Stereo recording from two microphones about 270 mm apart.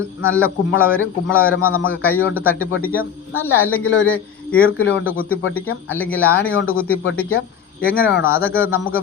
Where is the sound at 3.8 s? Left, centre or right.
Left.